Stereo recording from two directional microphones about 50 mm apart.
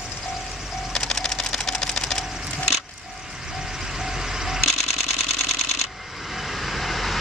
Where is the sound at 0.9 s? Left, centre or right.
Centre.